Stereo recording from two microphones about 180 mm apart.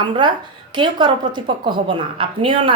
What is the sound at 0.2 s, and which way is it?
A woman's voice, 25° right (ahead or behind).